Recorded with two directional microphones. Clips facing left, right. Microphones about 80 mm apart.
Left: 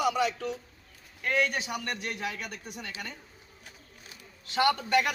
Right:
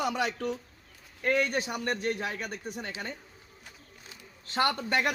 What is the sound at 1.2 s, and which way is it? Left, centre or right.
A man's voice, right.